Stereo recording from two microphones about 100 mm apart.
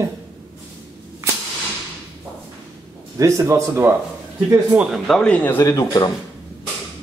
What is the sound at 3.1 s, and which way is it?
Speech, 30° right (ahead or behind).